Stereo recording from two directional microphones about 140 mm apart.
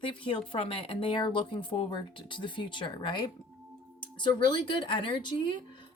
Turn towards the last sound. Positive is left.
turn(degrees=35)  # may be behind; listen again after turning